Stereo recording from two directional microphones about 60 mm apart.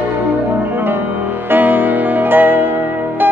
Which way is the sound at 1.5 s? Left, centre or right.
Right.